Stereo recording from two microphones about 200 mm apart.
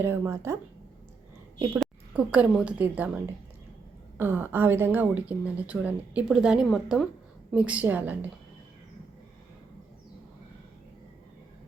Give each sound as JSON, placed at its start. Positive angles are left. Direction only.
{"t": 0.0, "sound": "a woman's voice", "side_deg": -15}
{"t": 1.8, "sound": "a woman's voice", "side_deg": -5}